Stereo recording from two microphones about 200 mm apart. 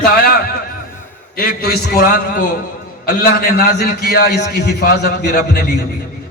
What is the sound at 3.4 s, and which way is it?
A man's voice, 50° left (ahead or behind).